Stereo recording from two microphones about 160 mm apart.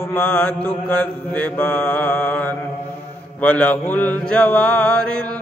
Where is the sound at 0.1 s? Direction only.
10° left (ahead or behind).